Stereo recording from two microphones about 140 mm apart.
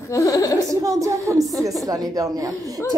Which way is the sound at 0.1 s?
25° left (ahead or behind).